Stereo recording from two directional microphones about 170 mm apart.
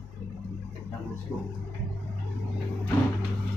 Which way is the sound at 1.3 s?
15° left (ahead or behind).